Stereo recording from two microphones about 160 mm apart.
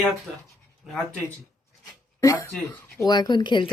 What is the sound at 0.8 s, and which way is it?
Speech, centre (ahead or behind).